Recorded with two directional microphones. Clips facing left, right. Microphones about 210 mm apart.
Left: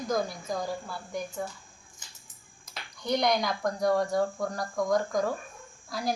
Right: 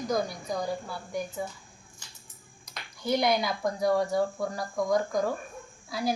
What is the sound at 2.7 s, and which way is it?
A woman's voice, 5° right (ahead or behind).